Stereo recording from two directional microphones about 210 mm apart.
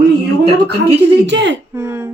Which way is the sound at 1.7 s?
10° right (ahead or behind).